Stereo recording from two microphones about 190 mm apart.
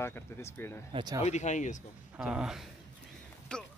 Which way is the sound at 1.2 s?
40° left (ahead or behind).